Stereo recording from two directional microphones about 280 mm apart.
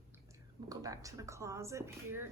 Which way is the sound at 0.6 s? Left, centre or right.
Centre.